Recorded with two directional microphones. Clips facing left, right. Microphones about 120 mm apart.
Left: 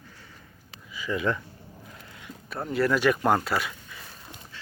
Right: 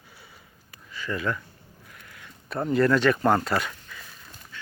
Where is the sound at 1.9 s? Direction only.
25° left (ahead or behind).